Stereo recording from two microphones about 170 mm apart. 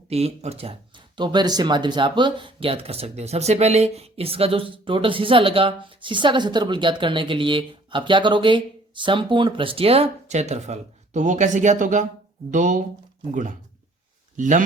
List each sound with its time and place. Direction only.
0.1 s speech: 40° right (ahead or behind)